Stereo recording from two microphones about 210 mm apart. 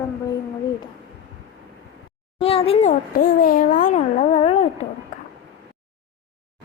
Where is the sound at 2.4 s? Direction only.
25° left (ahead or behind).